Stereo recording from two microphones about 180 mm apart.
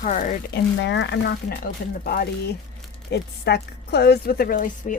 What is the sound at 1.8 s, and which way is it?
Speech, 55° left (ahead or behind).